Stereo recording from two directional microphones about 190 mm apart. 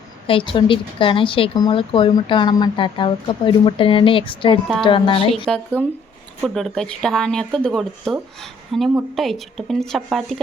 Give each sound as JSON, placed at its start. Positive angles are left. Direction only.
{"t": 0.3, "sound": "speech", "side_deg": 25}
{"t": 5.7, "sound": "speech", "side_deg": 5}